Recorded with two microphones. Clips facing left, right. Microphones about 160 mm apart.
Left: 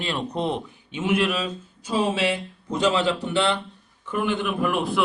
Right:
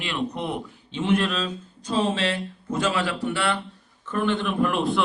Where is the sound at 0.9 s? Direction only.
10° left (ahead or behind).